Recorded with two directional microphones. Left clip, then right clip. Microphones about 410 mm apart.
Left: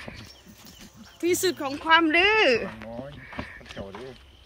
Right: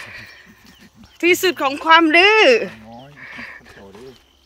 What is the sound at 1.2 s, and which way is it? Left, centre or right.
Speech, centre.